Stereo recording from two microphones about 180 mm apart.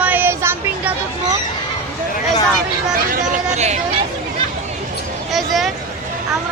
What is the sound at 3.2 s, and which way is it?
Chatter, 40° right (ahead or behind).